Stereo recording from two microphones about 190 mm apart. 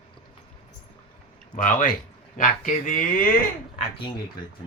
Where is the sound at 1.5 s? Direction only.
45° left (ahead or behind).